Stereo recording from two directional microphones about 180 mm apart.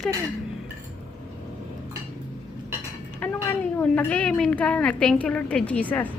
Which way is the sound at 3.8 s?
10° left (ahead or behind).